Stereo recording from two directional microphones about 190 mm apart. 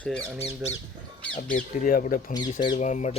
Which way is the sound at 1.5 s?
45° left (ahead or behind).